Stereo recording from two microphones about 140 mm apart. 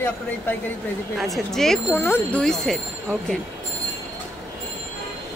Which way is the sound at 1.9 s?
15° left (ahead or behind).